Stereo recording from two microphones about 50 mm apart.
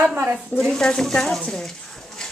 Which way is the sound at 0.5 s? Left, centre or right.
Centre.